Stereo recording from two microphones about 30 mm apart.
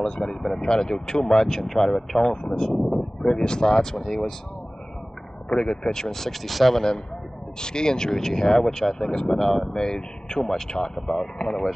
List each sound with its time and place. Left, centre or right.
0.0 s speech: left
1.4 s speech: centre
2.7 s speech: centre
3.0 s speech: left
5.5 s speech: left
5.9 s speech: centre
7.6 s speech: left
9.1 s speech: left
9.4 s speech: centre
9.7 s speech: left